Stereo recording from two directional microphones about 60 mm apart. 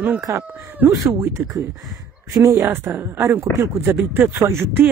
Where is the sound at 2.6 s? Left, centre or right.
Right.